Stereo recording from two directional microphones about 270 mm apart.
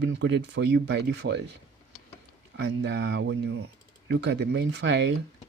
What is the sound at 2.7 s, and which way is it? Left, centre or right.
Speech, right.